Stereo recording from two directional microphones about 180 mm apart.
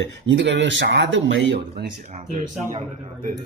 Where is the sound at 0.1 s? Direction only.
80° right.